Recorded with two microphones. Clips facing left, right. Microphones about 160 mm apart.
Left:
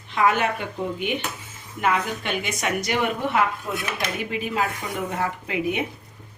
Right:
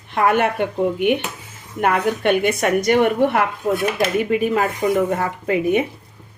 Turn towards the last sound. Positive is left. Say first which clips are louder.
# right 8 dB
turn(degrees=-50)  # may be behind; listen again after turning